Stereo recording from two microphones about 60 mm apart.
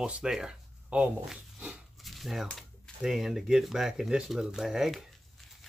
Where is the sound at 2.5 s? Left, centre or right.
Centre.